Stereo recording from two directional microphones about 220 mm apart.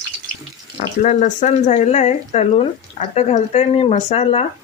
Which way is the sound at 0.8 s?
35° left (ahead or behind).